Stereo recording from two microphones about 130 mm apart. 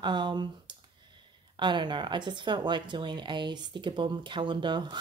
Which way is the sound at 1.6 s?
35° right (ahead or behind).